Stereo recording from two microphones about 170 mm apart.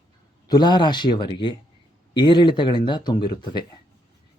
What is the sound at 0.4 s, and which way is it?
Speech, 25° left (ahead or behind).